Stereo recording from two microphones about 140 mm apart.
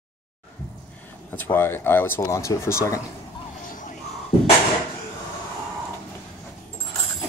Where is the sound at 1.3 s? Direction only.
15° left (ahead or behind).